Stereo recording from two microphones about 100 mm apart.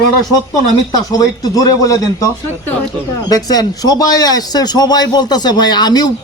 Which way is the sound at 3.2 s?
40° left (ahead or behind).